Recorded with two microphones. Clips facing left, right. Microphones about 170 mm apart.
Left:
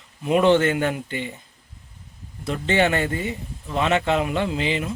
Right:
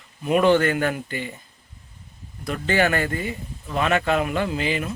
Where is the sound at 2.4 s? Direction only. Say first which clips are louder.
Left 1 dB; 25° left (ahead or behind).